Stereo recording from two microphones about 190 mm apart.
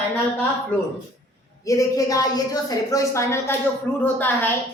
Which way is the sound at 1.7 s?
20° left (ahead or behind).